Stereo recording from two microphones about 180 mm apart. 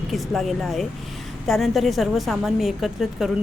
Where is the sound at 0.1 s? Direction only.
Centre (ahead or behind).